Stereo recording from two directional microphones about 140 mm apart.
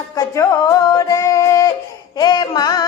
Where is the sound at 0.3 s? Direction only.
25° left (ahead or behind).